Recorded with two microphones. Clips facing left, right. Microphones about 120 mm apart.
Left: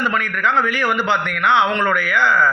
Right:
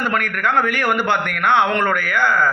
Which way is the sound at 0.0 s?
55° right (ahead or behind).